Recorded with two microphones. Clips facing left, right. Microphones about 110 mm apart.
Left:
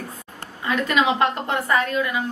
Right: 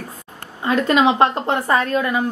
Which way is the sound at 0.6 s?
35° right (ahead or behind).